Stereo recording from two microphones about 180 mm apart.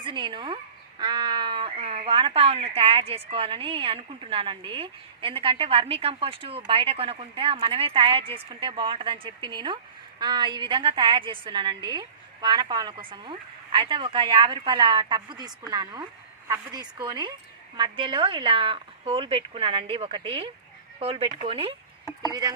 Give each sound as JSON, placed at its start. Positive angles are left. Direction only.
{"t": 0.0, "sound": "a woman's voice", "side_deg": -25}
{"t": 22.3, "sound": "a woman's voice", "side_deg": -20}